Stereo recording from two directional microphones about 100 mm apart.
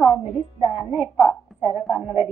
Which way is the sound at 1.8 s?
Centre (ahead or behind).